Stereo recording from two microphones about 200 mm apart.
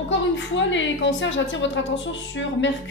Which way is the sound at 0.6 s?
65° left (ahead or behind).